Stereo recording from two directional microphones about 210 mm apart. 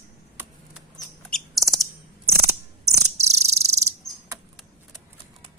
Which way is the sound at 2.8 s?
30° right (ahead or behind).